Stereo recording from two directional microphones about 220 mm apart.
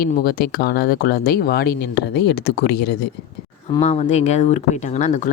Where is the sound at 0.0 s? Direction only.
40° left (ahead or behind).